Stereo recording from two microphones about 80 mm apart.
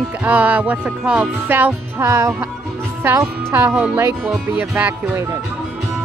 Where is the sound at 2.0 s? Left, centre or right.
Right.